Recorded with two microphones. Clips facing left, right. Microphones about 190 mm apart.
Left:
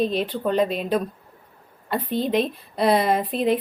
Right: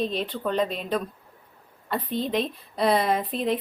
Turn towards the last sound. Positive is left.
turn(degrees=5)  # may be behind; listen again after turning